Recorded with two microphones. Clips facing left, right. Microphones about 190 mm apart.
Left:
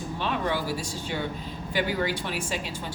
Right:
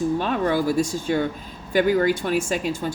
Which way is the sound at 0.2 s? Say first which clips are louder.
Right 6 dB; 45° right (ahead or behind).